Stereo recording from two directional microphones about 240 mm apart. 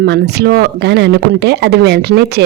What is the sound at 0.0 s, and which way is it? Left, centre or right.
Speech, right.